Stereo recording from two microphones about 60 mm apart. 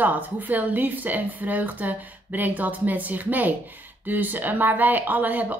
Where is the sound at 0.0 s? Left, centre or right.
Right.